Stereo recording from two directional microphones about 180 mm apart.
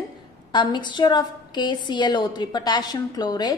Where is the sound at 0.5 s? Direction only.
25° left (ahead or behind).